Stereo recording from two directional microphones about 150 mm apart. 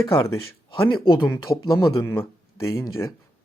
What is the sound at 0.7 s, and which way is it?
Speech, 35° left (ahead or behind).